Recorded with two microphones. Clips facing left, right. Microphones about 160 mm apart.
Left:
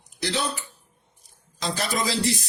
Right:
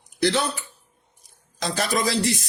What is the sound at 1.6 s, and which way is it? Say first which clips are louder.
Speech: right 3 dB; 50° right (ahead or behind).